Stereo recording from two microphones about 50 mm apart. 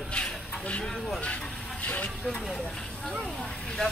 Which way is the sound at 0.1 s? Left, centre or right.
Left.